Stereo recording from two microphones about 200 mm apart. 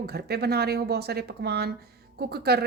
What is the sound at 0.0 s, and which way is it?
A woman's voice, 55° right (ahead or behind).